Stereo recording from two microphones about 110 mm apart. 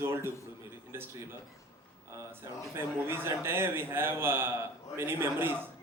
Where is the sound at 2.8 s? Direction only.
20° right (ahead or behind).